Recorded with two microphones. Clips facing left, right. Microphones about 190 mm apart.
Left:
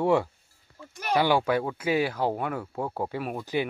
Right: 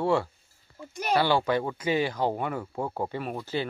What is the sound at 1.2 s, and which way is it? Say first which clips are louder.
Speech: left 1 dB; 10° left (ahead or behind).